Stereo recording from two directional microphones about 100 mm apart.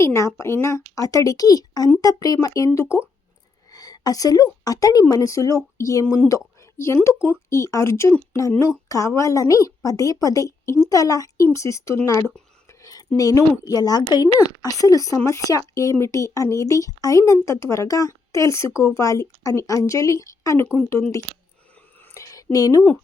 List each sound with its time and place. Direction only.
0.0 s speech: 30° left (ahead or behind)
3.7 s a sound: 40° left (ahead or behind)
4.6 s speech: 40° left (ahead or behind)
12.6 s whispering: 35° left (ahead or behind)
13.1 s speech: 35° left (ahead or behind)
22.1 s a sound: 30° left (ahead or behind)
22.5 s speech: 35° left (ahead or behind)